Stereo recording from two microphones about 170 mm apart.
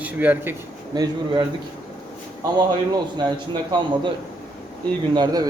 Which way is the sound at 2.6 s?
25° right (ahead or behind).